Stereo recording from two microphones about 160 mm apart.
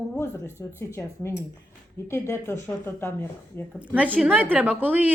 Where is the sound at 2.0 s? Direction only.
15° left (ahead or behind).